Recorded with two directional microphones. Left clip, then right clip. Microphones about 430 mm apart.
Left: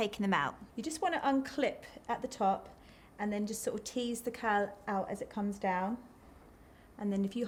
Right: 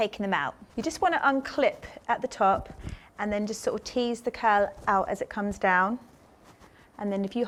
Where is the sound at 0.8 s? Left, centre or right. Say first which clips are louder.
Right 9 dB; right.